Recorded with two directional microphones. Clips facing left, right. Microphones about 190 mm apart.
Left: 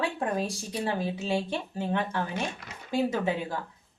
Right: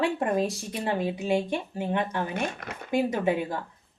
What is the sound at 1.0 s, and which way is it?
Speech, 15° right (ahead or behind).